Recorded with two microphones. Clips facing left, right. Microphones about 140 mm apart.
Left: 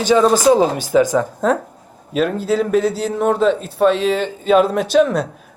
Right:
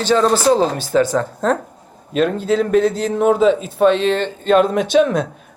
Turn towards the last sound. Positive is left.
turn(degrees=0)  # may be behind; listen again after turning